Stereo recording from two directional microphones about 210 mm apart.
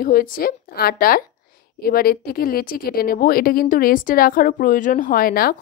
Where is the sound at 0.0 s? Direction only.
40° left (ahead or behind).